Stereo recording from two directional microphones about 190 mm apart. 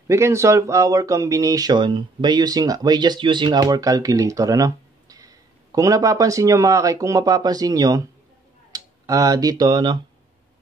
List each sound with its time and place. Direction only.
0.1 s speech: 15° right (ahead or behind)